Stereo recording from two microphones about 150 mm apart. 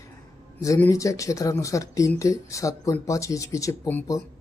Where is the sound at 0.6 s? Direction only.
20° left (ahead or behind).